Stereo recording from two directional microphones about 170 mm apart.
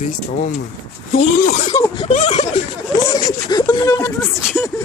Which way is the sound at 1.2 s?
45° left (ahead or behind).